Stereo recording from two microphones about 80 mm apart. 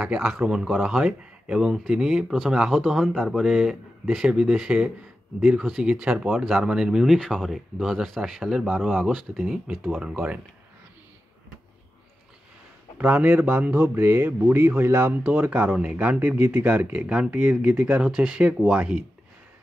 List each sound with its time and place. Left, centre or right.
0.0 s speech: centre
8.6 s speech: centre
10.0 s speech: centre
12.9 s speech: right
15.2 s speech: centre